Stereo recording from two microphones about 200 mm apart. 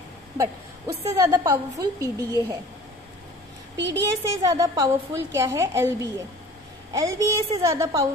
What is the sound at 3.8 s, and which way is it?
Speech, 65° right (ahead or behind).